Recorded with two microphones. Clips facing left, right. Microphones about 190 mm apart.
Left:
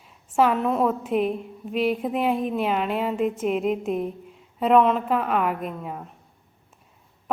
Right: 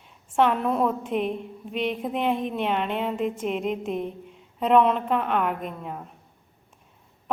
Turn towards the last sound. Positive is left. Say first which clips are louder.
# left 2 dB
turn(degrees=5)  # may be behind; listen again after turning